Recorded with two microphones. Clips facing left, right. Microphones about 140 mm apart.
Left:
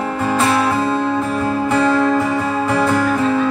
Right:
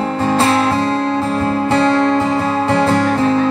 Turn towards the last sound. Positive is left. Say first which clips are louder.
# right 2 dB
turn(degrees=-30)  # may be behind; listen again after turning